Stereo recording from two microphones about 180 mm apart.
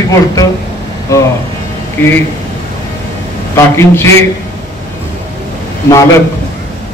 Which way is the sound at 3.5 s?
15° left (ahead or behind).